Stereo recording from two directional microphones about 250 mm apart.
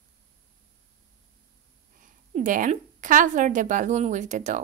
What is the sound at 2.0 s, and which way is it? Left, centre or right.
A woman's voice, right.